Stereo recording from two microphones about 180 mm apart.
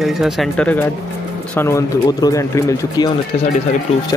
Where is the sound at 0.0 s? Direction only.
Centre (ahead or behind); by 3.1 s 15° left (ahead or behind).